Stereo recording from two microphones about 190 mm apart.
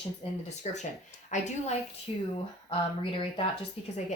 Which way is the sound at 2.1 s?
30° left (ahead or behind).